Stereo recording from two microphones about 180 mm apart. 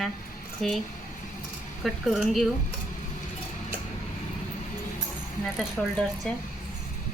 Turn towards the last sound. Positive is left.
turn(degrees=5)  # may be behind; listen again after turning